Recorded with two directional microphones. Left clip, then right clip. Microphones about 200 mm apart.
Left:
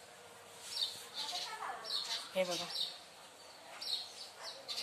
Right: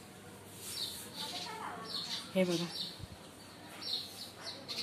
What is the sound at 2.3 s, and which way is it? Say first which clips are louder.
Speech: right 3 dB; 5° left (ahead or behind).